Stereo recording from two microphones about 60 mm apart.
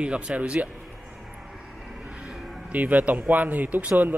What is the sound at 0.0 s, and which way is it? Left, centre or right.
Speech, centre.